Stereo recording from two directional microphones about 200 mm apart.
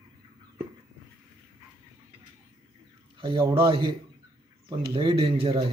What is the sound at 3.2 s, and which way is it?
Speech, 25° right (ahead or behind).